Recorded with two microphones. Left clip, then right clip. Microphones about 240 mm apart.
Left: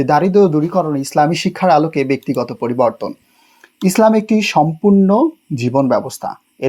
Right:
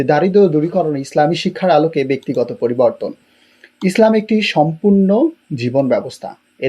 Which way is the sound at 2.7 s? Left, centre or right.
Left.